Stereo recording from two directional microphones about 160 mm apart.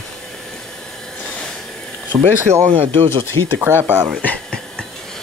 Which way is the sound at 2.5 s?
40° right (ahead or behind).